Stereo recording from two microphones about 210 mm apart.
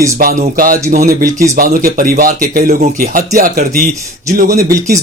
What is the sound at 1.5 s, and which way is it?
Speech, 40° right (ahead or behind).